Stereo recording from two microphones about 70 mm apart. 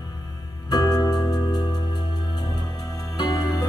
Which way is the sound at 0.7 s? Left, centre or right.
Left.